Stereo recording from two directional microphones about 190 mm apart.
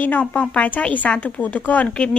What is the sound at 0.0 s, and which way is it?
A woman's voice, 10° left (ahead or behind).